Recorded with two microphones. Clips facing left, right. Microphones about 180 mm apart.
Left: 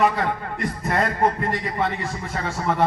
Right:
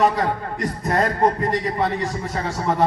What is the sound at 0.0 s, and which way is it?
A man's voice, 40° right (ahead or behind).